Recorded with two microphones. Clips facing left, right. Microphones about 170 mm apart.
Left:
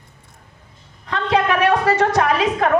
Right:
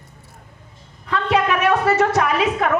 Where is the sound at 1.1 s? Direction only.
30° left (ahead or behind).